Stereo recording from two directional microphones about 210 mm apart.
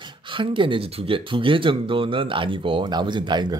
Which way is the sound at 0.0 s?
25° right (ahead or behind).